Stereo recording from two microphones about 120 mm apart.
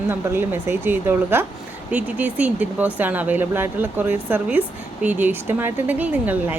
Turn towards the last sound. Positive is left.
turn(degrees=-15)  # may be behind; listen again after turning